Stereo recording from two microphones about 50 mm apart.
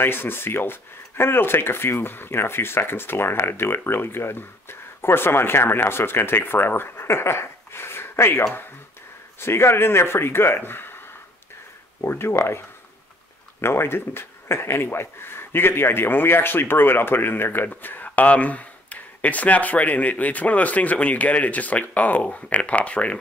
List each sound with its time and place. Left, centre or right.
0.0 s speech: left
12.1 s speech: left